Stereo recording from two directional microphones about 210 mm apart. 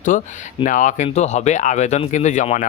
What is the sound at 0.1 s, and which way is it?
Speech, 40° left (ahead or behind).